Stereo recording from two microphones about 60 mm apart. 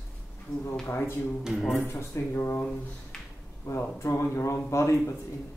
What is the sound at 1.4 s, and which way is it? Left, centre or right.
Speech, centre.